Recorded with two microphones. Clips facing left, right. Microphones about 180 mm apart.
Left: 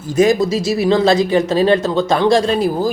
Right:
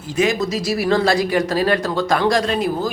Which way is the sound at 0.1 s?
40° left (ahead or behind).